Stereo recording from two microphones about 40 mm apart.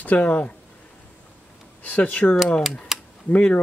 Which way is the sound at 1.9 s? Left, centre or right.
Left.